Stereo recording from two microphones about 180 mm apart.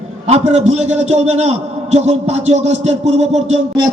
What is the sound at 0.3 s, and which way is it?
A man's voice, 35° right (ahead or behind).